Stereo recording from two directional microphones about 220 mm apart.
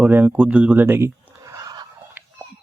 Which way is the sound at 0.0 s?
10° right (ahead or behind).